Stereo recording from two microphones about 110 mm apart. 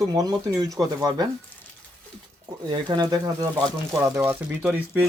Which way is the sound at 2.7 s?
40° right (ahead or behind).